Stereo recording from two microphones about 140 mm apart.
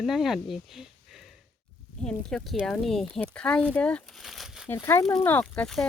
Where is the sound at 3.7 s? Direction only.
10° left (ahead or behind).